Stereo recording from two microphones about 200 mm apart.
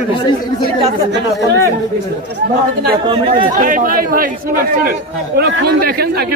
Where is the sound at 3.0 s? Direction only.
25° right (ahead or behind).